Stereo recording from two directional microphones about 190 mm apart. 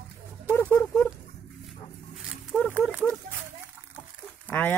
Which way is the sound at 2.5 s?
Centre (ahead or behind).